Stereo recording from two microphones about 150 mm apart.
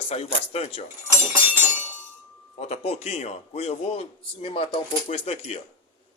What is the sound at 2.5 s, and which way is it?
A man's voice, 45° left (ahead or behind).